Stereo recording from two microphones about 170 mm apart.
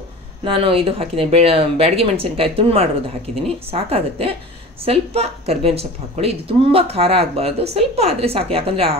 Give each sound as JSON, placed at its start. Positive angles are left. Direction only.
{"t": 0.4, "sound": "a woman's voice", "side_deg": -30}